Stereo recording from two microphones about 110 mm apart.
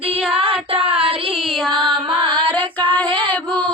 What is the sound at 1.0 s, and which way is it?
Child singing, 55° right (ahead or behind).